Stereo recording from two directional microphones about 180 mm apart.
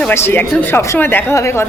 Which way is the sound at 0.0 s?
15° left (ahead or behind).